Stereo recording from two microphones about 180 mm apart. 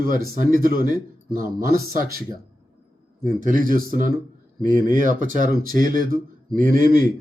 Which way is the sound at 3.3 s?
50° right (ahead or behind).